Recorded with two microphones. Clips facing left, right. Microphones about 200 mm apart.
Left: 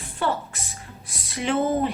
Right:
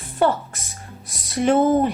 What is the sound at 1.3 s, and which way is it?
Speech, 45° right (ahead or behind).